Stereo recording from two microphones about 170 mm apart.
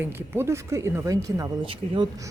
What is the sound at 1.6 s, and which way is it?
Speech, 30° right (ahead or behind).